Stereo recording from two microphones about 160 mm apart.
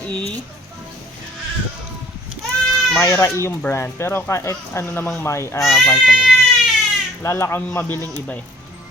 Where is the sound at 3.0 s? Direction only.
20° left (ahead or behind).